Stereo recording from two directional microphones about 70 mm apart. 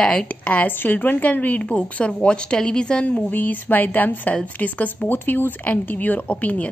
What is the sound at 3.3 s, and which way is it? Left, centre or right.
A woman's voice, left.